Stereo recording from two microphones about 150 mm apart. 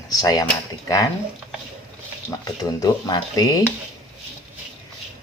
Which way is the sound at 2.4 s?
25° left (ahead or behind).